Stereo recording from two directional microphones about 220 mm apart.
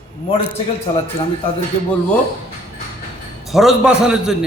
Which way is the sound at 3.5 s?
Centre (ahead or behind).